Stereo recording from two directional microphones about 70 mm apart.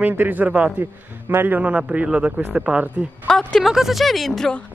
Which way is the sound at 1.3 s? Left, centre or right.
Right.